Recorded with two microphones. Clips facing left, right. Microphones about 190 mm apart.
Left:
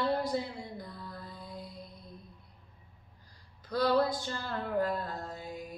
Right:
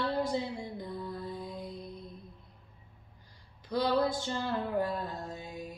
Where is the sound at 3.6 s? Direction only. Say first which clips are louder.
Left 1 dB; 20° right (ahead or behind).